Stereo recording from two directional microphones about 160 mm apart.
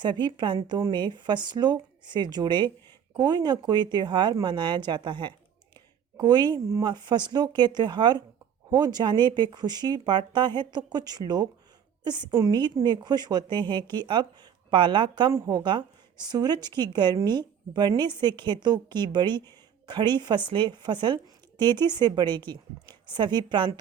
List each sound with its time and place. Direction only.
0.0 s speech: 30° right (ahead or behind)